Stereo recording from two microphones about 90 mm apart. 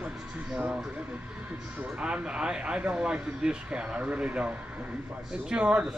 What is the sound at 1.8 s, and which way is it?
A man's voice, 15° right (ahead or behind).